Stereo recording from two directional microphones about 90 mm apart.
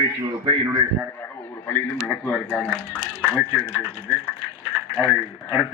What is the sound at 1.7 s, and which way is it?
Speech, 20° left (ahead or behind).